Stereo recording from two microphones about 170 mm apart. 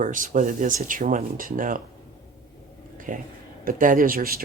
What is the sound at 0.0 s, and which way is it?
Speech, 50° right (ahead or behind).